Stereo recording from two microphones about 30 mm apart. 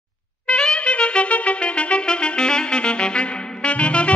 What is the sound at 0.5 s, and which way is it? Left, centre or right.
Music, left.